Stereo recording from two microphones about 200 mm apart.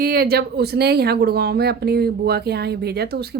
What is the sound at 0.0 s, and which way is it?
Speech, 50° right (ahead or behind).